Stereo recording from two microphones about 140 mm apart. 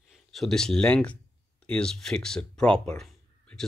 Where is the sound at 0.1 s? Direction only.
Centre (ahead or behind).